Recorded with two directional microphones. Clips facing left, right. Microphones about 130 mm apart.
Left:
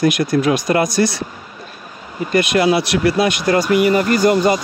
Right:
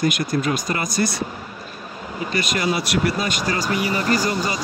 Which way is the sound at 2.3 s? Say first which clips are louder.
Left 9 dB; 80° left.